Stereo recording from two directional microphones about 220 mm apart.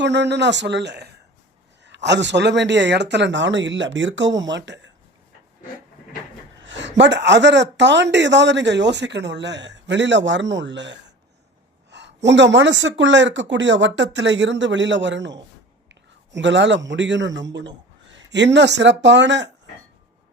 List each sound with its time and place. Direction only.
0.0 s speech: 55° right (ahead or behind)
6.7 s a man's voice: 55° right (ahead or behind)